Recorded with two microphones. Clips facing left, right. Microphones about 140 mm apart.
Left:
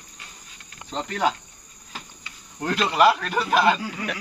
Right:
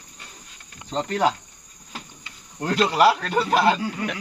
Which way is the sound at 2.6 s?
30° right (ahead or behind).